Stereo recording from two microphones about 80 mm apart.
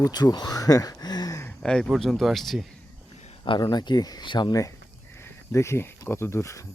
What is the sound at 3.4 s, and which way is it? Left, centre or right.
Speech, left.